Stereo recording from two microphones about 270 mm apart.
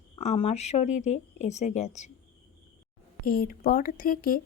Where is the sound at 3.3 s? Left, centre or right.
Left.